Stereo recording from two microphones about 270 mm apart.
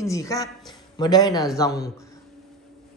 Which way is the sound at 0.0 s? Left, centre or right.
Centre.